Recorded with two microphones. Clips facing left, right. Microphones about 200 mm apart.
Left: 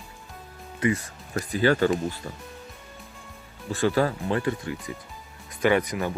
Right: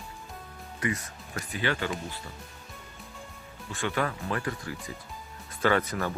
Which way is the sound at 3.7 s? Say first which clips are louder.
Left 7 dB; 35° left (ahead or behind).